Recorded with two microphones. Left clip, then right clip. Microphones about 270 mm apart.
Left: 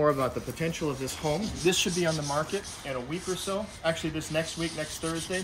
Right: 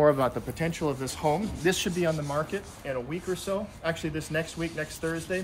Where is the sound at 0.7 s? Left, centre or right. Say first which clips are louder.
Right 1 dB; centre.